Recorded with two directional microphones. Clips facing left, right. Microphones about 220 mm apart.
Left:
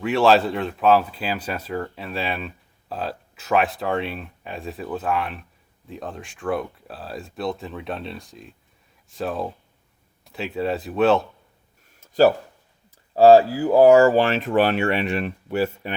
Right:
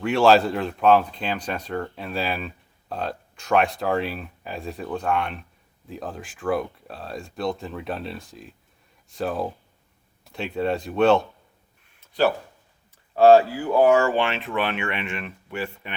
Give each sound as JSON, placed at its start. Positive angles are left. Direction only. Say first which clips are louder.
{"t": 0.0, "sound": "speech", "louder": "even", "side_deg": 0}
{"t": 11.9, "sound": "a sound", "louder": "left 5 dB", "side_deg": 40}
{"t": 13.1, "sound": "speech", "louder": "left 2 dB", "side_deg": 35}